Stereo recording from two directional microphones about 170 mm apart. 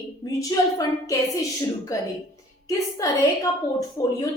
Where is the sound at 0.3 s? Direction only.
20° left (ahead or behind).